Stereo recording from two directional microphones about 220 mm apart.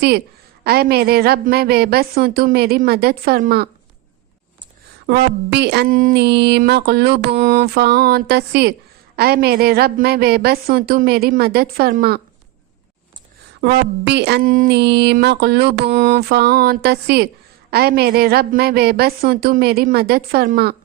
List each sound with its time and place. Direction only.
0.6 s a woman's voice: 45° right (ahead or behind)
5.0 s a woman's voice: 50° right (ahead or behind)
7.3 s a woman's voice: 35° right (ahead or behind)
13.6 s a woman's voice: 45° right (ahead or behind)
15.6 s a woman's voice: 35° right (ahead or behind)